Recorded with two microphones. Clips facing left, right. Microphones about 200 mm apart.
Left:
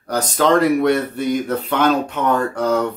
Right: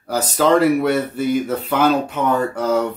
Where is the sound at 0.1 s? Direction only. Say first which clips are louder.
Even; 5° right (ahead or behind).